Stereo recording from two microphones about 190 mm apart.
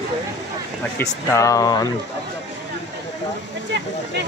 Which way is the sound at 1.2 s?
15° left (ahead or behind).